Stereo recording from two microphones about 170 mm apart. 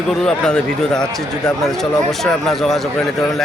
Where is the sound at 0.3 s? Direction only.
5° left (ahead or behind).